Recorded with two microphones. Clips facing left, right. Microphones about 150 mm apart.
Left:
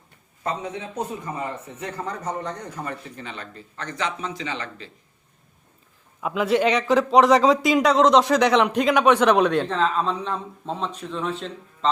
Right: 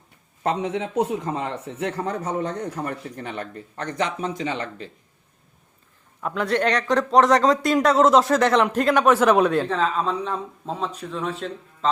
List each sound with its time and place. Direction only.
0.4 s speech: 80° right; by 4.9 s 50° right (ahead or behind)
6.2 s speech: 5° left (ahead or behind)